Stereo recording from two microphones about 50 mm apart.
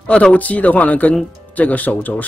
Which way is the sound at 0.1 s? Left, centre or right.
Left.